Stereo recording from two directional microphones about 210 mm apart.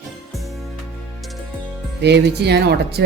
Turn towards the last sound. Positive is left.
turn(degrees=-50)  # may be behind; listen again after turning